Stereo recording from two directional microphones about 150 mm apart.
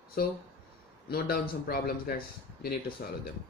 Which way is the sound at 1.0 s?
90° left.